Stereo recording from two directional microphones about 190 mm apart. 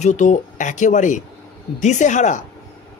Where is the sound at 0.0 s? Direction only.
40° left (ahead or behind).